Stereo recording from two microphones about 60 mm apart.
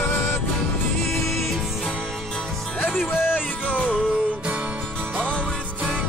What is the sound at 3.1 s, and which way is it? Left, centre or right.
Music, left.